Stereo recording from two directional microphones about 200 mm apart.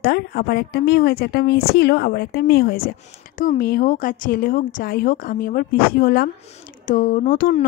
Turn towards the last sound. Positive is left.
turn(degrees=45)  # may be behind; listen again after turning